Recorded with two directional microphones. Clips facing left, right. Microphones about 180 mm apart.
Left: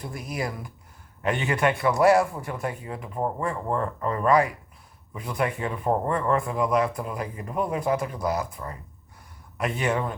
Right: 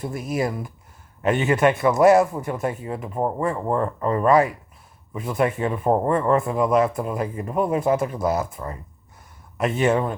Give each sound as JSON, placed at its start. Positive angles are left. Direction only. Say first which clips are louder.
{"t": 0.0, "sound": "speech", "louder": "right 7 dB", "side_deg": -25}